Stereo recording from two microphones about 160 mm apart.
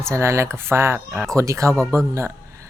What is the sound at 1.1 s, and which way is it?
Speech, 5° left (ahead or behind).